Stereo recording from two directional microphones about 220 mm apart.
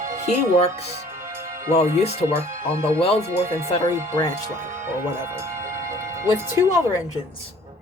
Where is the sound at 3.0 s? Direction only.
25° left (ahead or behind).